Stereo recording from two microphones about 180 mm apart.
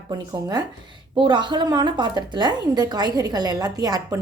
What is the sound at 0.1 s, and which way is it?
A woman's voice, 20° right (ahead or behind).